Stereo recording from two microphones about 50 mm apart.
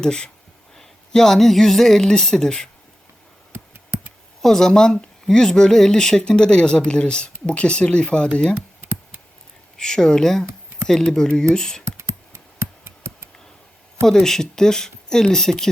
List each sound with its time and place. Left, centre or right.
0.0 s speech: centre
3.5 s a sound: right
4.4 s speech: centre
9.7 s speech: centre
11.9 s a sound: right
14.0 s speech: centre